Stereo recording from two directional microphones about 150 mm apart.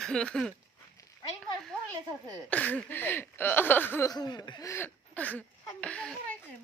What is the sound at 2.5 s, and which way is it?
Speech, 10° left (ahead or behind).